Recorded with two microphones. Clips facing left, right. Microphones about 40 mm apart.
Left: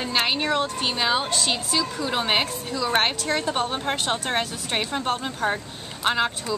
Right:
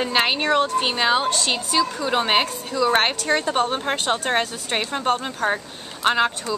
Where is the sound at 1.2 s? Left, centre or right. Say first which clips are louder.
Right 3 dB; centre.